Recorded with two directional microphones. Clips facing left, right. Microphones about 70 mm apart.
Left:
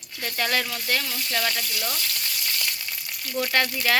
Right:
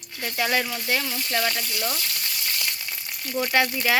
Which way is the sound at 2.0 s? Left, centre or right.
Centre.